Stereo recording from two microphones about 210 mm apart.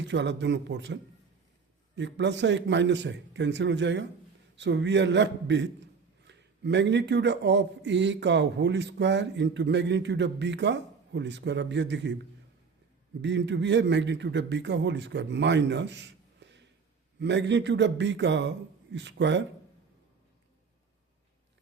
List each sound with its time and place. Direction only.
0.0 s speech: 55° right (ahead or behind)
2.0 s speech: 55° right (ahead or behind)
13.2 s speech: 55° right (ahead or behind)